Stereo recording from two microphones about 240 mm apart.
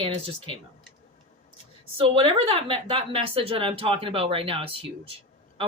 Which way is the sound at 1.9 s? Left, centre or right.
Right.